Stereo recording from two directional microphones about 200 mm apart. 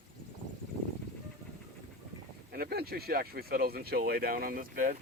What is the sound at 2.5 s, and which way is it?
Speech, 50° right (ahead or behind).